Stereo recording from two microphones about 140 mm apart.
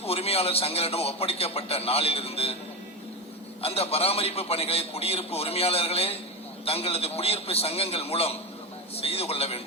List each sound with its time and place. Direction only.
0.0 s a man's voice: 45° left (ahead or behind)
3.6 s a man's voice: 45° left (ahead or behind)